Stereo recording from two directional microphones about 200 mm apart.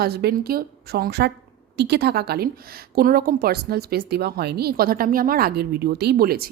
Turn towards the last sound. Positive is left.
turn(degrees=-50)  # may be behind; listen again after turning